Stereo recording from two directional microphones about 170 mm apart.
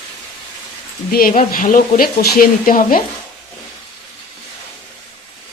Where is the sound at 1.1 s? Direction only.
55° left (ahead or behind).